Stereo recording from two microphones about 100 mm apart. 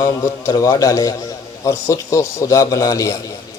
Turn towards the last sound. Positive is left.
turn(degrees=35)  # may be behind; listen again after turning